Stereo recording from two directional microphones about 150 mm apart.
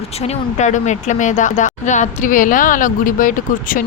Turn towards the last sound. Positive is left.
turn(degrees=65)  # may be behind; listen again after turning